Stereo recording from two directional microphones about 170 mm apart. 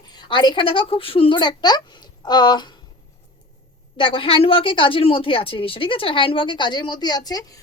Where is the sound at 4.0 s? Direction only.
30° left (ahead or behind).